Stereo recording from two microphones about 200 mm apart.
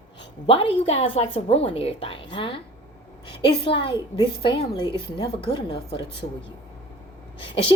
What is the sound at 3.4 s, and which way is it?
Speech, 25° left (ahead or behind).